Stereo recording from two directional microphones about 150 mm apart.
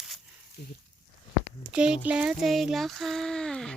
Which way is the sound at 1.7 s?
5° right (ahead or behind).